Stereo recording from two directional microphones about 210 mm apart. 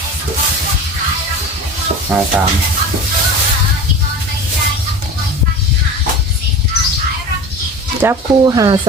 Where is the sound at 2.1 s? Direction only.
5° right (ahead or behind).